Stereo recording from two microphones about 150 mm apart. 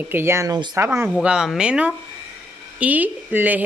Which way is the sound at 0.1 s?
15° right (ahead or behind).